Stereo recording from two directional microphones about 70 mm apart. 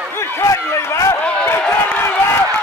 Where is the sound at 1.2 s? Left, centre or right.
Centre.